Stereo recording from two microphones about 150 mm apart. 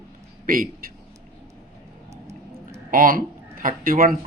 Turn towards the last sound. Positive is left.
turn(degrees=-70)  # may be behind; listen again after turning